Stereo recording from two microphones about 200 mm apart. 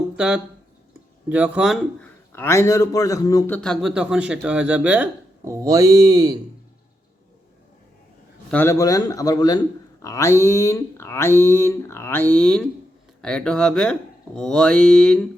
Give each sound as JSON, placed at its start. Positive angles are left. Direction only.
{"t": 0.2, "sound": "a man's voice", "side_deg": -5}
{"t": 2.3, "sound": "a man's voice", "side_deg": 15}
{"t": 8.4, "sound": "a man's voice", "side_deg": 10}